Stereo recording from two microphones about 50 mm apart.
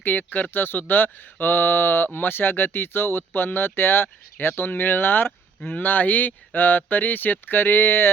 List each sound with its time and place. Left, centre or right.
0.0 s speech: left